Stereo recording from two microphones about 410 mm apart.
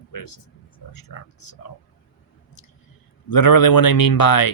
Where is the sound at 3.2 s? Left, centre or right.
Left.